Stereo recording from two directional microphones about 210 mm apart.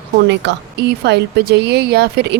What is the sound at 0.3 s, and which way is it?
Speech, 55° right (ahead or behind).